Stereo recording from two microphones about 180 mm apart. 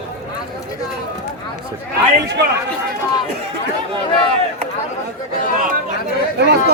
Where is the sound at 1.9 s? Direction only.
70° right (ahead or behind).